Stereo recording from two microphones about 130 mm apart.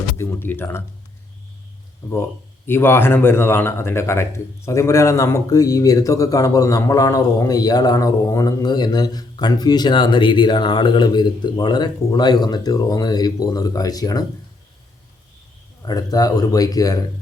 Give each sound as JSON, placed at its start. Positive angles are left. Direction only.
{"t": 0.2, "sound": "speech", "side_deg": 20}
{"t": 2.6, "sound": "speech", "side_deg": 20}
{"t": 15.8, "sound": "speech", "side_deg": 30}